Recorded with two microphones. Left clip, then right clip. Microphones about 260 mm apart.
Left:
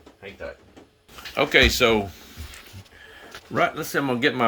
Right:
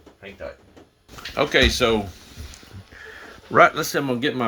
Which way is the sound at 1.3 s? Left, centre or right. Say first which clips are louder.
Left 1 dB; centre.